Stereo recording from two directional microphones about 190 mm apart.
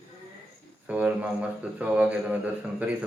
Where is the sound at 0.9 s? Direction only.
5° right (ahead or behind).